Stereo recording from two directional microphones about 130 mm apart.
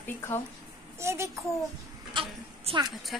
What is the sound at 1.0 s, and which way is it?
Speech, 20° right (ahead or behind).